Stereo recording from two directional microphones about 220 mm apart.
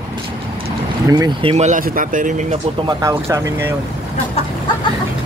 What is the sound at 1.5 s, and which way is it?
Speech, 35° right (ahead or behind).